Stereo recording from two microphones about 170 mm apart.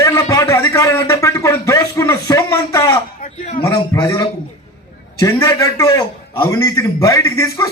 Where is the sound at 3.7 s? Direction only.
20° left (ahead or behind).